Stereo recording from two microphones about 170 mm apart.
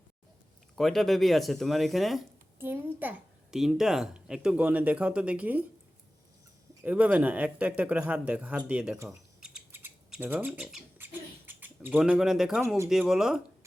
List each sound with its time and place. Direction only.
0.8 s speech: centre (ahead or behind)
2.6 s a woman's voice: 10° right (ahead or behind)
6.8 s a woman's voice: 10° right (ahead or behind)
9.0 s mechanisms: 5° right (ahead or behind)
12.6 s a woman's voice: 15° right (ahead or behind)
12.9 s speech: centre (ahead or behind)